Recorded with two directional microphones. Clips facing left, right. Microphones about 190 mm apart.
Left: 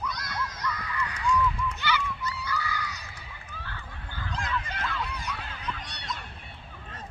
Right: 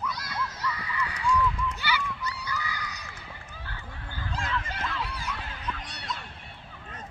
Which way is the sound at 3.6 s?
15° right (ahead or behind).